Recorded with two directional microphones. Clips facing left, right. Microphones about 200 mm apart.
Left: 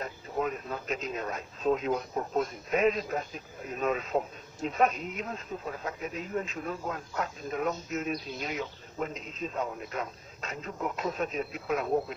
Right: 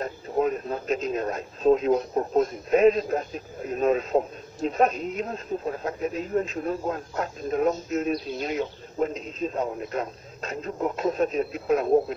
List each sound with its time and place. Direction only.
0.0 s a man's voice: 35° right (ahead or behind)